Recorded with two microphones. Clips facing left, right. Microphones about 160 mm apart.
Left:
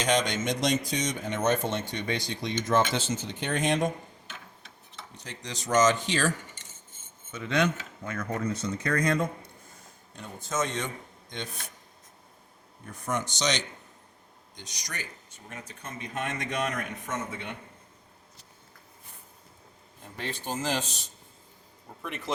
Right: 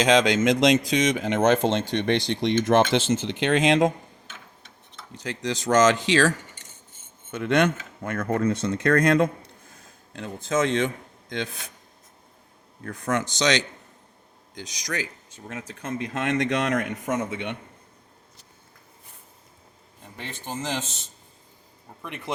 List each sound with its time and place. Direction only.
0.0 s speech: 90° right; by 2.6 s 75° right (ahead or behind)
2.6 s speech: 90° right
5.1 s speech: 90° right
7.3 s speech: 65° right (ahead or behind); by 11.7 s 90° right
12.8 s speech: 90° right
20.3 s speech: 15° left (ahead or behind)